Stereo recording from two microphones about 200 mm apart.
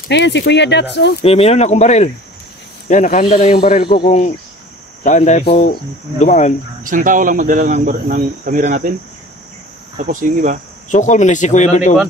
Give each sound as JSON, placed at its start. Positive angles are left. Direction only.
{"t": 0.1, "sound": "speech", "side_deg": 60}
{"t": 1.2, "sound": "speech", "side_deg": 30}
{"t": 6.8, "sound": "speech", "side_deg": -45}
{"t": 9.9, "sound": "speech", "side_deg": -40}
{"t": 10.9, "sound": "speech", "side_deg": 40}